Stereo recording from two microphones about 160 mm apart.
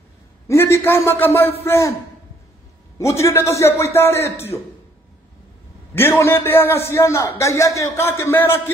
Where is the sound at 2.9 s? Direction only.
20° left (ahead or behind).